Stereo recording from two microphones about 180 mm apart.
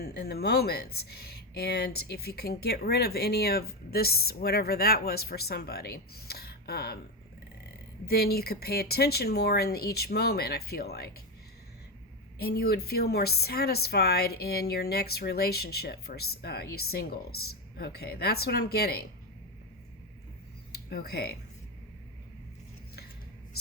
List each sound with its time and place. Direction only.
0.0 s speech: 60° left (ahead or behind)
8.0 s speech: 60° left (ahead or behind)
12.4 s speech: 60° left (ahead or behind)
20.7 s speech: 60° left (ahead or behind)